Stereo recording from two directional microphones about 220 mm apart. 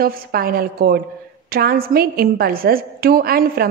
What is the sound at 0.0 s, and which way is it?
A woman's voice, 40° right (ahead or behind).